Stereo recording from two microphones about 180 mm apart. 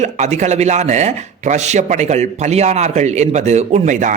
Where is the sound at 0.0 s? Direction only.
40° right (ahead or behind).